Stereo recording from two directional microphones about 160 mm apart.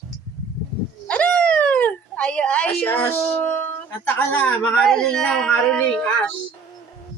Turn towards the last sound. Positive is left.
turn(degrees=5)  # may be behind; listen again after turning